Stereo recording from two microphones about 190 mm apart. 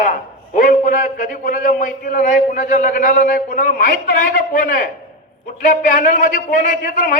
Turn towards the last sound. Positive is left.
turn(degrees=45)  # may be behind; listen again after turning